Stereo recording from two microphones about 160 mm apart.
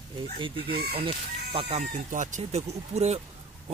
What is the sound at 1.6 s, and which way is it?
Speech, 40° right (ahead or behind).